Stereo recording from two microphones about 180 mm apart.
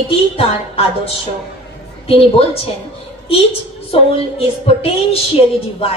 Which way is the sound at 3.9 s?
30° left (ahead or behind).